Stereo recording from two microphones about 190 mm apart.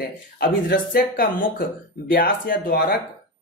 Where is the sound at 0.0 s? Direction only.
50° left (ahead or behind).